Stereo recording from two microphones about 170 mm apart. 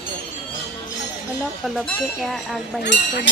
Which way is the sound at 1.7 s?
Centre (ahead or behind).